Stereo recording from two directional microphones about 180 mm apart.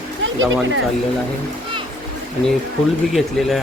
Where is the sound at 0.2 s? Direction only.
90° right.